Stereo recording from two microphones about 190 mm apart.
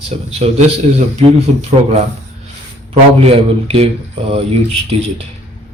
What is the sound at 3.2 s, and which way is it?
Speech, 30° right (ahead or behind).